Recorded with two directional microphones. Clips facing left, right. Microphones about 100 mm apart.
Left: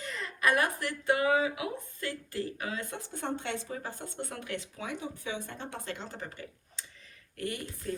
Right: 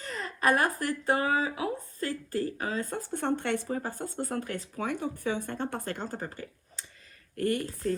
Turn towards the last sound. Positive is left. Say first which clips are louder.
# right 7 dB
turn(degrees=-50)  # may be behind; listen again after turning